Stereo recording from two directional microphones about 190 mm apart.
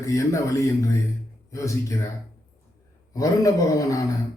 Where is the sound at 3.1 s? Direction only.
20° left (ahead or behind).